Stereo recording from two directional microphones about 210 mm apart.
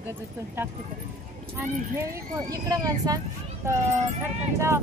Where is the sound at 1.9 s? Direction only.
15° right (ahead or behind).